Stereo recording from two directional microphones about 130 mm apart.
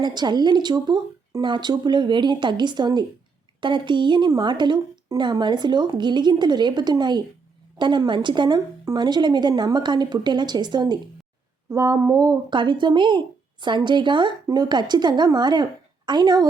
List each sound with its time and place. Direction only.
0.0 s a woman's voice: 35° right (ahead or behind)
11.7 s a woman's voice: 25° right (ahead or behind)